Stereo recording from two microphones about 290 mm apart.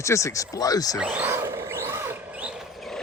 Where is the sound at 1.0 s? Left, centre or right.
Centre.